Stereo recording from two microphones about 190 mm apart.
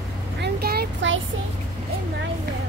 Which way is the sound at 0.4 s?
55° right (ahead or behind).